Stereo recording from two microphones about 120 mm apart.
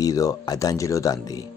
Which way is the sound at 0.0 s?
30° left (ahead or behind).